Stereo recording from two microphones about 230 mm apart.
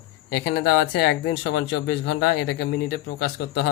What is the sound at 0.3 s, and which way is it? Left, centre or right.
Speech, left.